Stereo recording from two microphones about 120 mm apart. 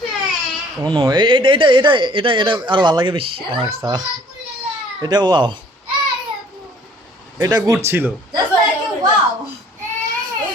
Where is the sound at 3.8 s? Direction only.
35° right (ahead or behind).